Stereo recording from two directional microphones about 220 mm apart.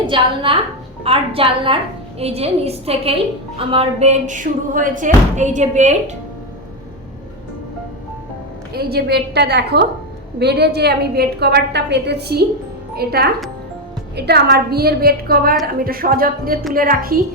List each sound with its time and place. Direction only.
0.1 s a woman's voice: 25° right (ahead or behind)
8.7 s a woman's voice: 45° right (ahead or behind)